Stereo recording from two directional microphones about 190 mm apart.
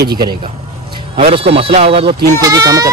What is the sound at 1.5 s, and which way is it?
Speech, 30° right (ahead or behind).